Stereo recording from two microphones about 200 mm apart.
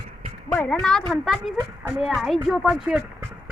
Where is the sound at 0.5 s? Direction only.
5° left (ahead or behind).